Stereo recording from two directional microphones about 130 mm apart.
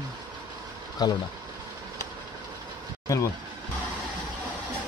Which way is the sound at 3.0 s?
25° left (ahead or behind).